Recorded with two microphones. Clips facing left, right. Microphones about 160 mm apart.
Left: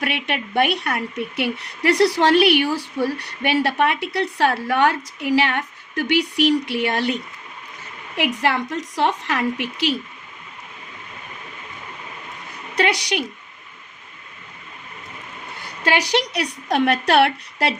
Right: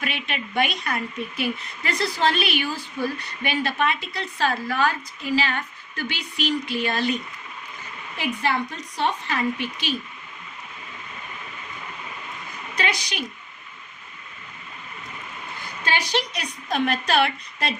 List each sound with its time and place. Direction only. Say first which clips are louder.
0.0 s a woman's voice: left 5 dB; 65° left (ahead or behind)
12.7 s a woman's voice: left 7 dB; 70° left (ahead or behind)
15.5 s a woman's voice: left 6 dB; 75° left (ahead or behind)